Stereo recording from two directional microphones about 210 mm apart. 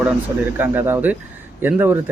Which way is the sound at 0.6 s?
10° right (ahead or behind).